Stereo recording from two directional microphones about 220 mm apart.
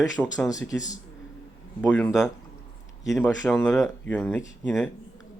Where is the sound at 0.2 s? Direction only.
5° left (ahead or behind).